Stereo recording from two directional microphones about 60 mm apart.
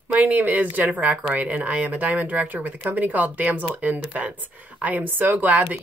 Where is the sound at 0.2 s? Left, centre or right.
Right.